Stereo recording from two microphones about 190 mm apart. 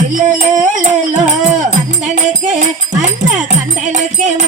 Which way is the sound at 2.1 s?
40° right (ahead or behind).